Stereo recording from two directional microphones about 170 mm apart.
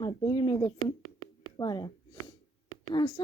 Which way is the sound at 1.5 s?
25° left (ahead or behind).